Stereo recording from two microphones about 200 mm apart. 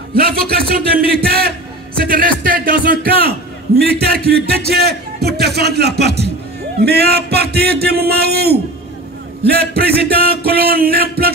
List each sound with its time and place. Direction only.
0.1 s a man's voice: 50° right (ahead or behind)